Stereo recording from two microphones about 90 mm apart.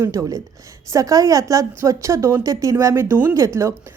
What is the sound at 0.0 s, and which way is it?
A woman's voice, 40° right (ahead or behind).